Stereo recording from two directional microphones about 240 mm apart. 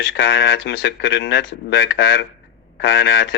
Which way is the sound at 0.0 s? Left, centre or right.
Left.